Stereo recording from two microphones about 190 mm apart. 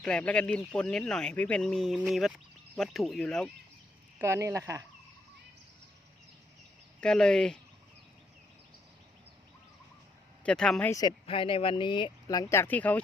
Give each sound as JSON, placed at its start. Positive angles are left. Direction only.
{"t": 0.0, "sound": "speech", "side_deg": 5}
{"t": 4.2, "sound": "speech", "side_deg": -15}
{"t": 7.0, "sound": "speech", "side_deg": 5}
{"t": 10.4, "sound": "speech", "side_deg": 5}
{"t": 10.9, "sound": "speech", "side_deg": 25}